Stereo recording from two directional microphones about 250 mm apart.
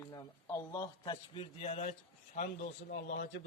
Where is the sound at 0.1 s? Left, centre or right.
Centre.